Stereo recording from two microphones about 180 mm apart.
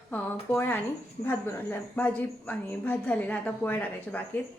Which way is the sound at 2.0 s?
10° left (ahead or behind).